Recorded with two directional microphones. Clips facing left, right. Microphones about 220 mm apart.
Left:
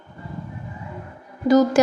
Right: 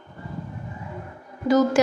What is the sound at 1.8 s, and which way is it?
Speech, 40° left (ahead or behind).